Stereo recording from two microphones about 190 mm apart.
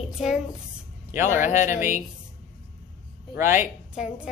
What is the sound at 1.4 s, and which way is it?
Speech, 40° left (ahead or behind).